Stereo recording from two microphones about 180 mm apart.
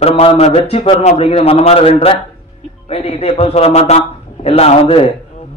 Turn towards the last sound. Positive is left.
turn(degrees=35)  # may be behind; listen again after turning